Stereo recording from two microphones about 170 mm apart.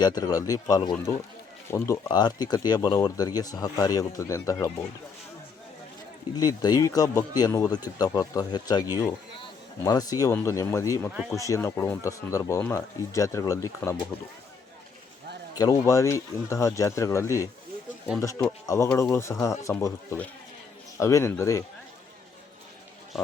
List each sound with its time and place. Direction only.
0.0 s speech: 20° left (ahead or behind)
6.3 s speech: 25° left (ahead or behind)
15.5 s speech: 20° left (ahead or behind)
18.6 s speech: 20° left (ahead or behind)
23.1 s a man's voice: centre (ahead or behind)